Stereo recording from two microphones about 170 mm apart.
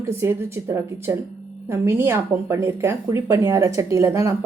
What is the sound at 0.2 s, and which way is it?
A woman's voice, 15° right (ahead or behind).